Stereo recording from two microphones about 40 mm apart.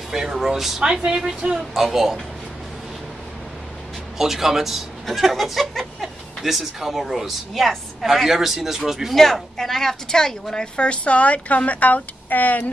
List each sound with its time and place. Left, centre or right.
0.1 s speech: centre
4.2 s speech: centre
9.1 s a woman's voice: centre; by 12.7 s left